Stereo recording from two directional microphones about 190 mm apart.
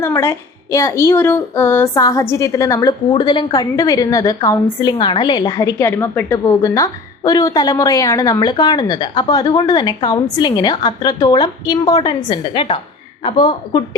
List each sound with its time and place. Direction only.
0.0 s a woman's voice: 15° left (ahead or behind)